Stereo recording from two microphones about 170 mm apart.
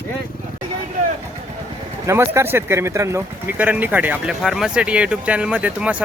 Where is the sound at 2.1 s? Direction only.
15° right (ahead or behind).